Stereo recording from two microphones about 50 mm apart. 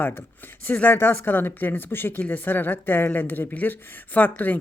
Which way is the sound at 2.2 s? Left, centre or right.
Left.